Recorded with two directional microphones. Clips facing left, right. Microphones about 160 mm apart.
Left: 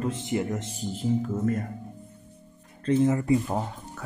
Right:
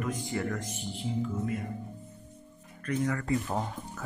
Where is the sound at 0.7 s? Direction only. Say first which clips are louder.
Left 7 dB; 40° left (ahead or behind).